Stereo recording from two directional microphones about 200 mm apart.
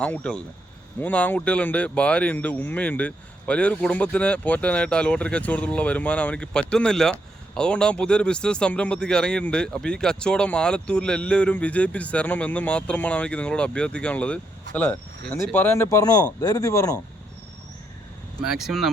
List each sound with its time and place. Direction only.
0.0 s a man's voice: 5° left (ahead or behind)
18.4 s speech: centre (ahead or behind)